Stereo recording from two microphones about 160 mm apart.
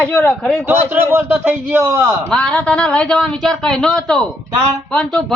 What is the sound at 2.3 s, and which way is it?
Speech, 5° left (ahead or behind).